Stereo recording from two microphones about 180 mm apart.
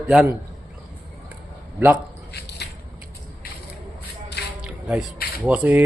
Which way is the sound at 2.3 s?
65° left (ahead or behind).